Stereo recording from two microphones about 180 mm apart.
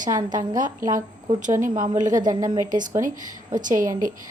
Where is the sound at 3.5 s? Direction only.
45° right (ahead or behind).